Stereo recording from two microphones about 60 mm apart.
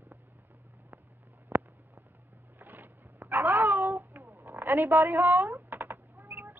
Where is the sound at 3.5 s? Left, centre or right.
Right.